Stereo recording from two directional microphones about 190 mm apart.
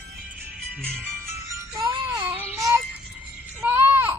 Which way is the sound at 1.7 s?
15° right (ahead or behind).